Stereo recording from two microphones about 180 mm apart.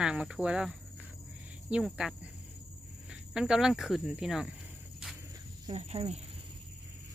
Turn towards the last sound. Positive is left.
turn(degrees=-35)  # may be behind; listen again after turning